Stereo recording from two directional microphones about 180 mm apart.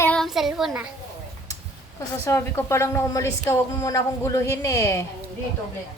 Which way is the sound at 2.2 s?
15° left (ahead or behind).